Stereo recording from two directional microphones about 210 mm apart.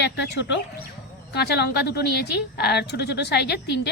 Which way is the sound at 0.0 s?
55° left (ahead or behind).